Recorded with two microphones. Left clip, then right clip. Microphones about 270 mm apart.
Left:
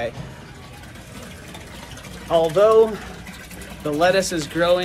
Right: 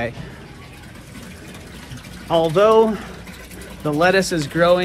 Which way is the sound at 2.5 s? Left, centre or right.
Centre.